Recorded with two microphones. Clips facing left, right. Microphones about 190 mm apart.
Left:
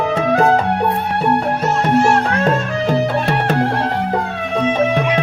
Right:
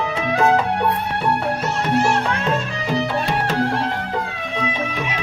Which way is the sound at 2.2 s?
50° left (ahead or behind).